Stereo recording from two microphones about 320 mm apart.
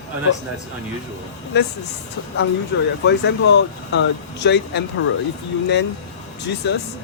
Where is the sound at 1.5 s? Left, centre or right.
Left.